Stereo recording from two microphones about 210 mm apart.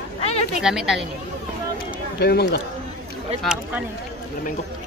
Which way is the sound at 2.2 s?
50° left (ahead or behind).